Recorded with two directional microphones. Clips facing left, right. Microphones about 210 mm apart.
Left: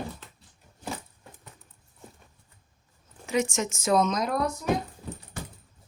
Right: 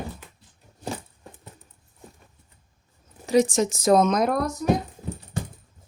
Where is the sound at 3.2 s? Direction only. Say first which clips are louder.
Right 7 dB; 35° right (ahead or behind).